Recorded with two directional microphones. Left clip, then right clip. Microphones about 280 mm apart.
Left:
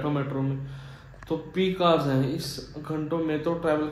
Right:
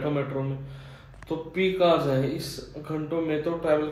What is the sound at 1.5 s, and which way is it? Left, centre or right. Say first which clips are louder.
Speech: right 2 dB; centre.